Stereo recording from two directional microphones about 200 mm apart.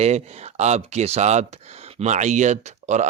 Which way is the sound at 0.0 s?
35° right (ahead or behind).